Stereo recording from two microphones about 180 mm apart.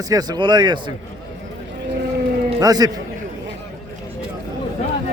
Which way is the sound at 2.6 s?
20° right (ahead or behind).